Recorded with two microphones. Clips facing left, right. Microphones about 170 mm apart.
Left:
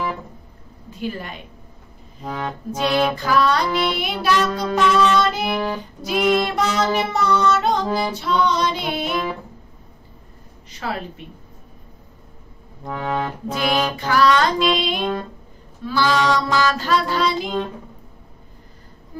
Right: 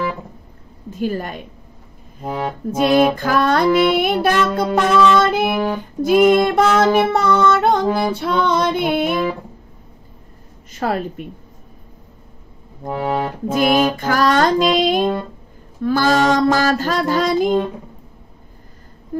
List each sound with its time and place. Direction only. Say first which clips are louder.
0.8 s a woman's voice: right 6 dB; 45° right (ahead or behind)
2.2 s accordion: right 4 dB; 30° right (ahead or behind)
2.7 s music: right 6 dB; 45° right (ahead or behind)
10.7 s music: right 7 dB; 45° right (ahead or behind)
12.8 s music: right 4 dB; 30° right (ahead or behind)
13.5 s music: right 7 dB; 45° right (ahead or behind)